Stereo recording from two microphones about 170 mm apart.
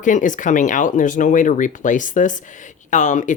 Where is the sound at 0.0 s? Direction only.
50° left (ahead or behind).